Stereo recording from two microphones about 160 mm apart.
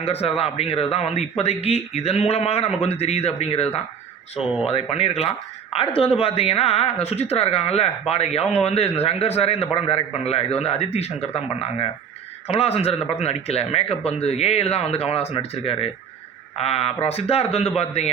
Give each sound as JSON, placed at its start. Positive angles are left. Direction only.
{"t": 0.0, "sound": "a man's voice", "side_deg": 40}